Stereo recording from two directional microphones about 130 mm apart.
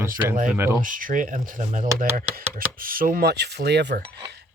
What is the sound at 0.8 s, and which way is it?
Speech, 90° right.